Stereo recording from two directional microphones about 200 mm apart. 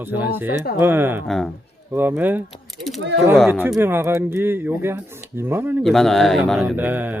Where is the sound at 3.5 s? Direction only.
10° right (ahead or behind).